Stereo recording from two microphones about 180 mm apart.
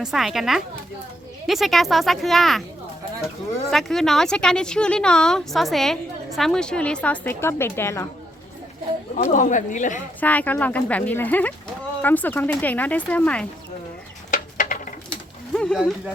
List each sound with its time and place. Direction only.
0.0 s speech: centre (ahead or behind)
3.7 s speech: centre (ahead or behind)
9.1 s speech: 45° left (ahead or behind)
10.2 s speech: 10° left (ahead or behind)
14.3 s a sound: 45° left (ahead or behind)
15.1 s a sound: 5° left (ahead or behind)